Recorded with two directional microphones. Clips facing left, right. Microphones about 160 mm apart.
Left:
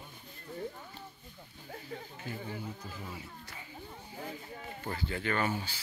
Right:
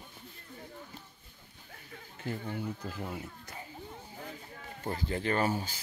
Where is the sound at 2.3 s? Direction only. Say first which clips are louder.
Right 5 dB; 60° right (ahead or behind).